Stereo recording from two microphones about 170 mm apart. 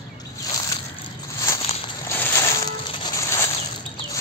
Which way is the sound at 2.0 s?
15° left (ahead or behind).